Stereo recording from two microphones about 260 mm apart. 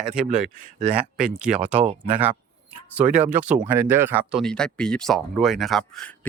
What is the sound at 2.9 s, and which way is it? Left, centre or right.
Speech, centre.